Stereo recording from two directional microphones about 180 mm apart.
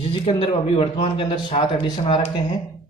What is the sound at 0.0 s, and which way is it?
A man's voice, 30° left (ahead or behind).